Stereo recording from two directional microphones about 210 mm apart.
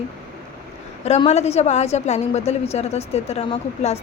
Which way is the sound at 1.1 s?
30° left (ahead or behind).